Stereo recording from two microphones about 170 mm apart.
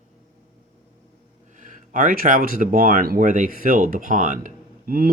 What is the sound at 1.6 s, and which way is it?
Speech, 50° right (ahead or behind).